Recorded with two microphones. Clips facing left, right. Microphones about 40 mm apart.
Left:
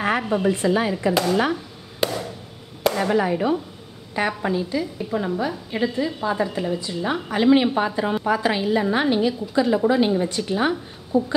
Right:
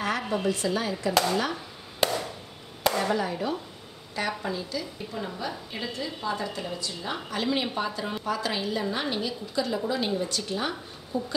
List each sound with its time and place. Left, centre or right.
0.0 s speech: left
1.5 s a sound: centre
3.0 s a woman's voice: left
11.1 s speech: centre